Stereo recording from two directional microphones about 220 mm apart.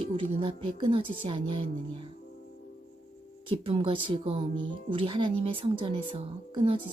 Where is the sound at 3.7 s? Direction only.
25° right (ahead or behind).